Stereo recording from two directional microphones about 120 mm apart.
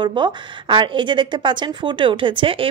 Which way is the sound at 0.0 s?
45° right (ahead or behind).